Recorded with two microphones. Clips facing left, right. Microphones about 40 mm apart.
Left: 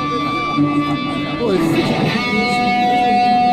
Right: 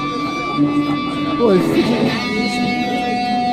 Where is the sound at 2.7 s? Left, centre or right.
Centre.